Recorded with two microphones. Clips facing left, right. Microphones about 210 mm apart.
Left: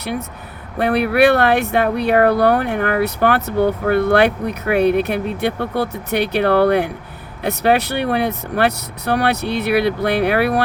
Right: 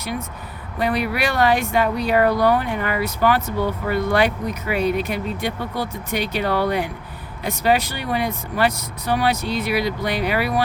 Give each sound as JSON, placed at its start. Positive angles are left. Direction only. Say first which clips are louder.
{"t": 0.8, "sound": "speech", "louder": "left 7 dB", "side_deg": 60}